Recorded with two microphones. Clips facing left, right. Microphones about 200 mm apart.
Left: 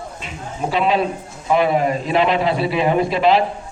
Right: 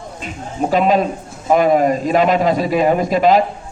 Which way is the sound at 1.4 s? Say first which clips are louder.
Right 4 dB; 45° right (ahead or behind).